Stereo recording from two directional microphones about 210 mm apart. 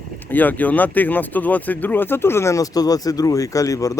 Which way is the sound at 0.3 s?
10° left (ahead or behind).